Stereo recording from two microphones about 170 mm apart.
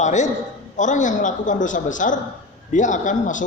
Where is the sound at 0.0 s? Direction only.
45° left (ahead or behind).